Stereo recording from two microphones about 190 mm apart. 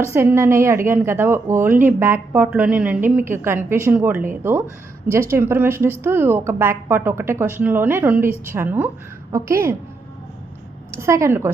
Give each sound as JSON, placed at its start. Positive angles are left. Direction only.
{"t": 0.1, "sound": "a woman's voice", "side_deg": -10}
{"t": 10.9, "sound": "a woman's voice", "side_deg": -15}